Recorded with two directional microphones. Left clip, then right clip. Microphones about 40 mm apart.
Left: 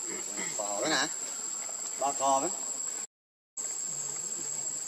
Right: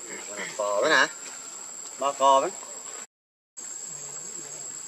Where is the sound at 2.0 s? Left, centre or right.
Right.